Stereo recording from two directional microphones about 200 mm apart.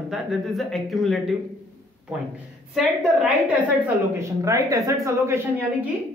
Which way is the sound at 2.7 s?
5° right (ahead or behind).